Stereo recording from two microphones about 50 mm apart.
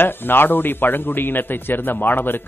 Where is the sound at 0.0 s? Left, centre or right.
Left.